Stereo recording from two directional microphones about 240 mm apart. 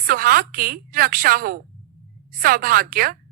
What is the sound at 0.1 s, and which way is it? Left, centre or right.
A woman's voice, right.